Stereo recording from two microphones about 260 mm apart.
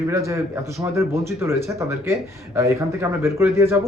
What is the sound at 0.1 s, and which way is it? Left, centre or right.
Speech, centre.